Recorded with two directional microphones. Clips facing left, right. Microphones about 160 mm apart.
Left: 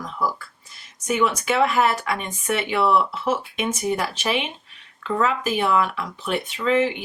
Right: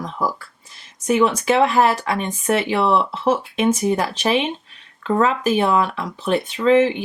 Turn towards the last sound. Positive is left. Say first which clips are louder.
# right 6 dB
turn(degrees=-35)  # may be behind; listen again after turning